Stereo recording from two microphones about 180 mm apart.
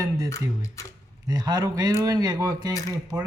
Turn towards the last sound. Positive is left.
turn(degrees=-15)  # may be behind; listen again after turning